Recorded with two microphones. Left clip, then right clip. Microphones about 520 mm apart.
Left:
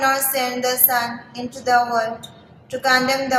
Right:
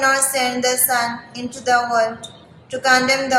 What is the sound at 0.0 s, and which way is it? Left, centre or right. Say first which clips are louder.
Speech: right 2 dB; left.